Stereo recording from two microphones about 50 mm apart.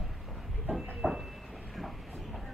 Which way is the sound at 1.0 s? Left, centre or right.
Centre.